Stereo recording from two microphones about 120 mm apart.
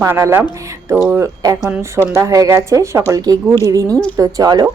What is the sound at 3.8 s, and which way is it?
Speech, 10° left (ahead or behind).